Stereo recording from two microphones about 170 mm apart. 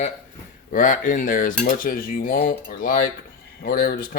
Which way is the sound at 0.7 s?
55° left (ahead or behind).